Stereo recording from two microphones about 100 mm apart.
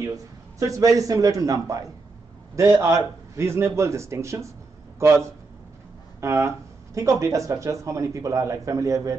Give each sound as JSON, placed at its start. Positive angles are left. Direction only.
{"t": 0.6, "sound": "a man's voice", "side_deg": -35}